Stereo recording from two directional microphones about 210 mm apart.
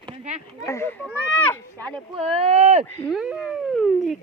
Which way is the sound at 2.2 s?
30° right (ahead or behind).